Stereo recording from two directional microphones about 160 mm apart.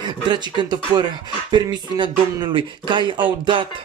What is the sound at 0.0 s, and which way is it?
Music, 25° right (ahead or behind).